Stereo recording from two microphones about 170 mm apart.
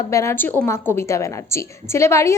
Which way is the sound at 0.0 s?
15° left (ahead or behind).